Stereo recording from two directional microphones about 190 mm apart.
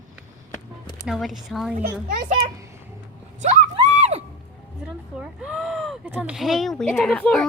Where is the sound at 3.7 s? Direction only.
35° right (ahead or behind).